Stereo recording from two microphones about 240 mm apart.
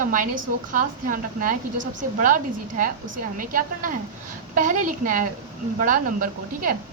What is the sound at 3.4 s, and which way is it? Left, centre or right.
A woman's voice, right.